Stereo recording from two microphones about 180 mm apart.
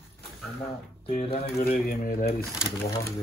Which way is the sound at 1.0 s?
40° left (ahead or behind).